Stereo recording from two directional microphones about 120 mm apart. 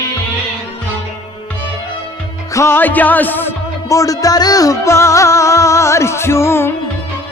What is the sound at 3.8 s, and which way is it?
Speech, 30° left (ahead or behind).